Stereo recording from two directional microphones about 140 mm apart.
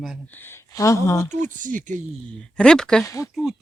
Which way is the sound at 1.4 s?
70° right (ahead or behind).